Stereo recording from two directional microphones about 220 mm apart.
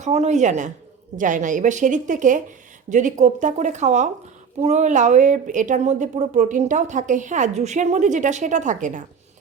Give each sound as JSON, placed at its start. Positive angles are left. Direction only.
{"t": 0.0, "sound": "a woman's voice", "side_deg": -30}